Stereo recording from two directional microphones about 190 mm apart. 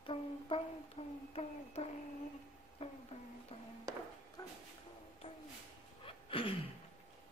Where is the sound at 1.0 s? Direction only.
30° left (ahead or behind).